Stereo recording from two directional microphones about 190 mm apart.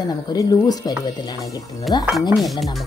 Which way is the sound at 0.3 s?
20° left (ahead or behind).